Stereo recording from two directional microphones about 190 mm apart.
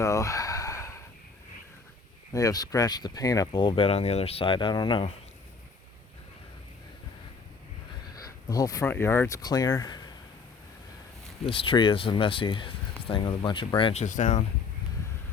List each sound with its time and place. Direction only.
0.0 s a sound: 15° left (ahead or behind)
2.3 s speech: 20° left (ahead or behind)
8.2 s speech: 20° left (ahead or behind)
11.4 s speech: 30° left (ahead or behind)
14.0 s speech: 40° left (ahead or behind)